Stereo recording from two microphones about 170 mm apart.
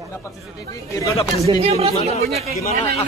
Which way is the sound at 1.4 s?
35° right (ahead or behind).